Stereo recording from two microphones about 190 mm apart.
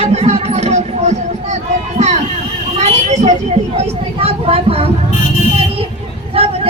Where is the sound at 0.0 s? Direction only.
35° right (ahead or behind).